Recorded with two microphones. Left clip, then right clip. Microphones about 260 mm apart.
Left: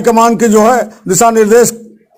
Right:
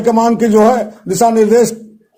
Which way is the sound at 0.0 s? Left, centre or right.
Left.